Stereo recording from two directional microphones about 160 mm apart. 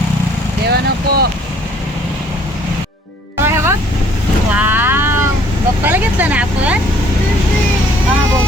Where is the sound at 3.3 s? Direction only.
15° right (ahead or behind).